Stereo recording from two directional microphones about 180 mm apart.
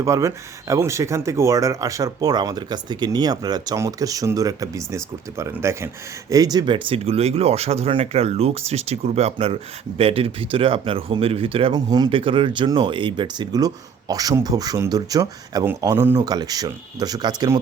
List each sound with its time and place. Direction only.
0.0 s speech: 15° right (ahead or behind)